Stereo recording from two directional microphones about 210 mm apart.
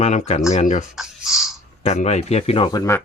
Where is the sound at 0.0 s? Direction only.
35° left (ahead or behind).